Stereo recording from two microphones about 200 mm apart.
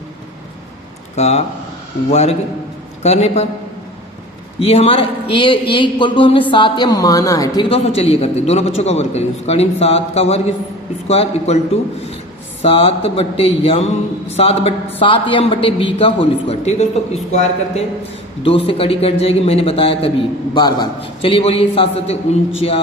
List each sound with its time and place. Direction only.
1.1 s a woman's voice: 30° left (ahead or behind)
4.6 s a man's voice: 30° left (ahead or behind)